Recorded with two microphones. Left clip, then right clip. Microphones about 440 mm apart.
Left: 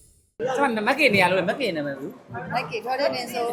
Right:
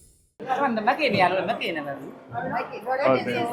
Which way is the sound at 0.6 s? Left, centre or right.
Left.